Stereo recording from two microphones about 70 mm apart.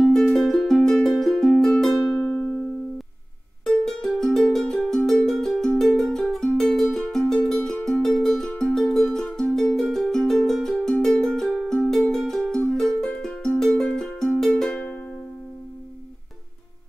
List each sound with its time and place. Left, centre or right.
0.0 s music: centre
3.8 s music: centre